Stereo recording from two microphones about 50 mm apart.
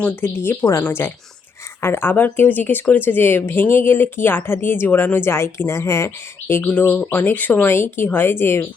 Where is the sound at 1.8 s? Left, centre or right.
Left.